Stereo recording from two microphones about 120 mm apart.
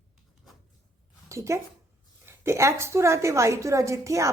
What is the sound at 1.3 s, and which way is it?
A woman's voice, 25° right (ahead or behind).